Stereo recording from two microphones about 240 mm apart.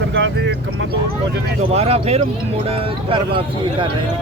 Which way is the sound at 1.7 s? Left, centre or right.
Right.